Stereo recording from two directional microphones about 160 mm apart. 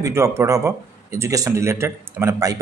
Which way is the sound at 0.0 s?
15° right (ahead or behind).